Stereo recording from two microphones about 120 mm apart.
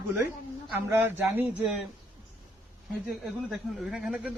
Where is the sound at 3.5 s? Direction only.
5° right (ahead or behind).